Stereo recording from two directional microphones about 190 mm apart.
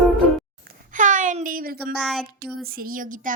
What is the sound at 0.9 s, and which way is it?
A child's voice, 40° right (ahead or behind).